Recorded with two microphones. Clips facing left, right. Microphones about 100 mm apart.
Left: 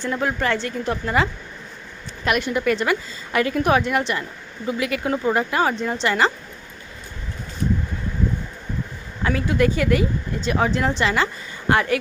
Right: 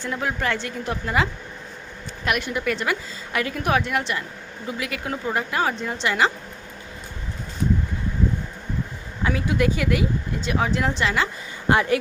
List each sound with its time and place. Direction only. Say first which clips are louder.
0.0 s speech: left 3 dB; 5° right (ahead or behind)
9.2 s speech: left 2 dB; 10° right (ahead or behind)
11.7 s speech: even; 20° right (ahead or behind)